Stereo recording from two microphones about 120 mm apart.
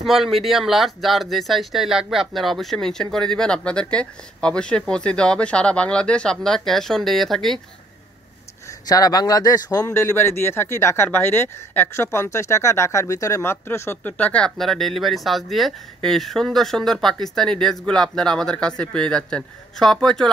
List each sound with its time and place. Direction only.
0.0 s speech: centre (ahead or behind)
8.6 s a man's voice: 30° left (ahead or behind); by 20.2 s 5° left (ahead or behind)